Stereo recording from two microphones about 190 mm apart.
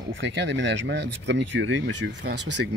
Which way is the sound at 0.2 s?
70° right (ahead or behind).